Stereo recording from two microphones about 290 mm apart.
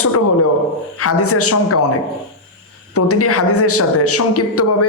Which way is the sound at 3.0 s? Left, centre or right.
Left.